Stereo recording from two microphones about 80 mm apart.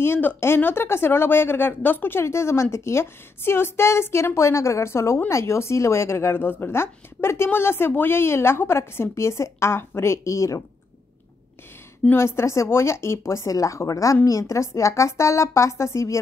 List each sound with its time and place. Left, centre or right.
0.0 s speech: left
12.2 s speech: left